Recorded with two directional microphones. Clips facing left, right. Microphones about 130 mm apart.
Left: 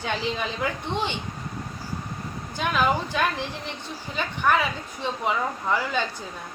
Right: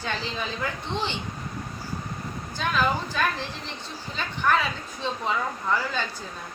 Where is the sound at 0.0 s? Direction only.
15° left (ahead or behind).